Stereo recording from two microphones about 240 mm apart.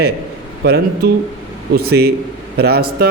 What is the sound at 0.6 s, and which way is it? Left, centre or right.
A man's voice, right.